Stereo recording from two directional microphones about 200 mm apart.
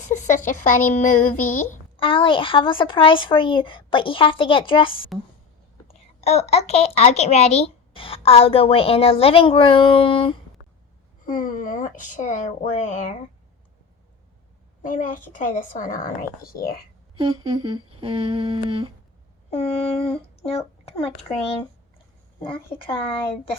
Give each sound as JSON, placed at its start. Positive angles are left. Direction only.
{"t": 0.1, "sound": "speech", "side_deg": 40}
{"t": 2.0, "sound": "a woman's voice", "side_deg": 25}
{"t": 11.3, "sound": "speech", "side_deg": 45}
{"t": 14.8, "sound": "speech", "side_deg": 40}
{"t": 17.2, "sound": "speech", "side_deg": -25}
{"t": 19.5, "sound": "speech", "side_deg": 30}
{"t": 22.4, "sound": "a woman's voice", "side_deg": 25}